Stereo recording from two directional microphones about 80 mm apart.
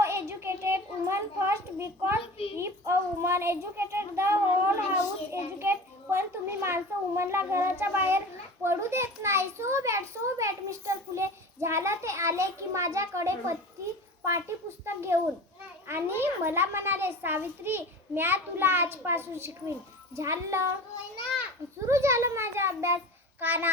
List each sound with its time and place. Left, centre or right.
0.0 s a sound: right
2.6 s a child's voice: right
21.8 s a child's voice: right